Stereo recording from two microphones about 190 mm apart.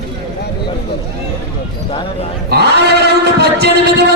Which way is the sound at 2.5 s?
60° right (ahead or behind).